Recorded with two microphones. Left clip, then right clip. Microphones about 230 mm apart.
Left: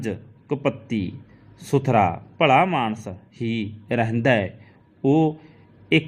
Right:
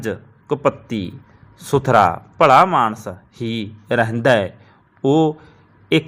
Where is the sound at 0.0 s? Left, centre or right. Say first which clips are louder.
Right 5 dB; centre.